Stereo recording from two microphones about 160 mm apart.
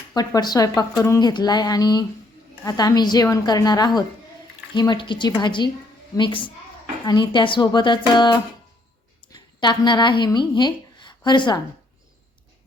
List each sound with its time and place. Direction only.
0.1 s a woman's voice: 25° left (ahead or behind)